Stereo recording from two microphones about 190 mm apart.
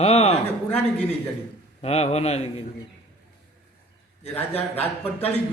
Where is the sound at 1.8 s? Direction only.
35° left (ahead or behind).